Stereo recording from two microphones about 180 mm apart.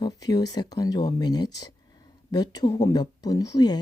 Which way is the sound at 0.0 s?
20° left (ahead or behind).